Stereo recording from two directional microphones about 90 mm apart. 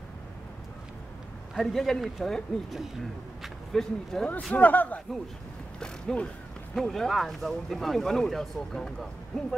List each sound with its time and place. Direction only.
1.5 s speech: 5° left (ahead or behind)
4.6 s a man's voice: 20° left (ahead or behind)
5.8 s mechanisms: 10° left (ahead or behind)
6.7 s speech: 5° left (ahead or behind)